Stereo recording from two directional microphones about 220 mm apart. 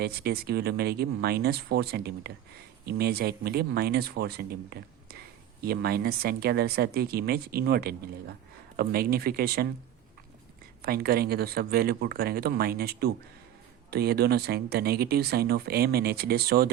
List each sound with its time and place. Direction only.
0.0 s speech: 45° right (ahead or behind)
10.8 s speech: 45° right (ahead or behind)